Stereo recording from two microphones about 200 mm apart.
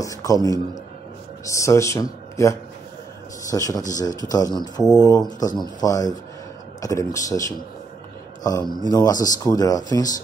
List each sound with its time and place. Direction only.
0.0 s a man's voice: 15° left (ahead or behind)